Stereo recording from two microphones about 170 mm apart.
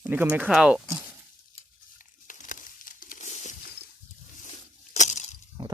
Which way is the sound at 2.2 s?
50° left (ahead or behind).